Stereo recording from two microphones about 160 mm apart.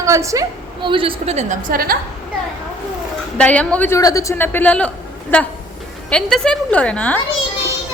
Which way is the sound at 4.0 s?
20° left (ahead or behind).